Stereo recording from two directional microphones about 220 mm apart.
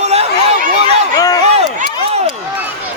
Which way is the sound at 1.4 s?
30° right (ahead or behind).